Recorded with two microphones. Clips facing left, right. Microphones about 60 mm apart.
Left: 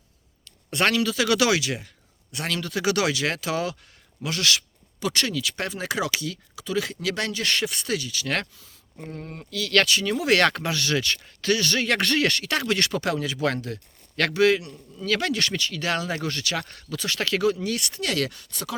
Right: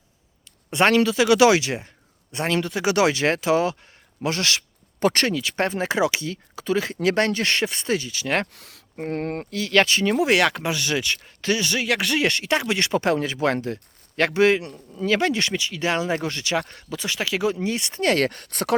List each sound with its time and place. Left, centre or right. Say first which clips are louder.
0.4 s speech: right 4 dB; right
4.9 s speech: right 6 dB; right
8.5 s speech: right 9 dB; right
9.5 s speech: right 2 dB; right
10.2 s speech: right 1 dB; centre
12.2 s speech: right 2 dB; right
17.5 s speech: right 2 dB; right